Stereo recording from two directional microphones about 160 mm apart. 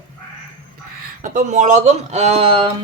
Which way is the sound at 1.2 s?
50° right (ahead or behind).